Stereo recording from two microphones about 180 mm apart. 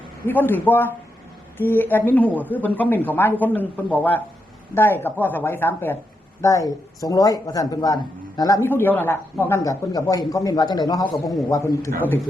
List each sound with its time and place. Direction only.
0.3 s speech: 10° left (ahead or behind)
11.1 s a man's voice: centre (ahead or behind)
11.4 s speech: 20° left (ahead or behind)